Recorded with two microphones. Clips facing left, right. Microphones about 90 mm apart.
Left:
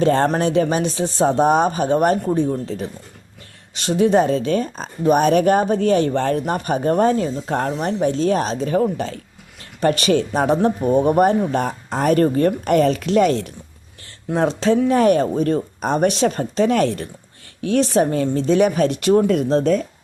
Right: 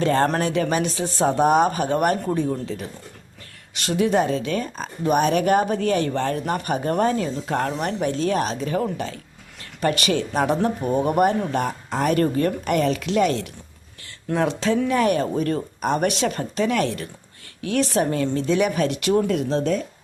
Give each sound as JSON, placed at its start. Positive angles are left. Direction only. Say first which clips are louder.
{"t": 0.0, "sound": "speech", "louder": "left 3 dB", "side_deg": 30}
{"t": 3.8, "sound": "speech", "louder": "left 4 dB", "side_deg": 30}
{"t": 11.5, "sound": "speech", "louder": "left 2 dB", "side_deg": 40}
{"t": 14.3, "sound": "speech", "louder": "left 4 dB", "side_deg": 30}